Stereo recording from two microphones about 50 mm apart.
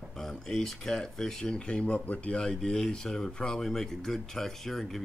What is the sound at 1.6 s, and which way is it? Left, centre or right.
Speech, left.